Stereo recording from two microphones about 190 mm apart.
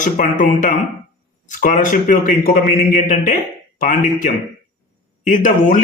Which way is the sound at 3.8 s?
40° left (ahead or behind).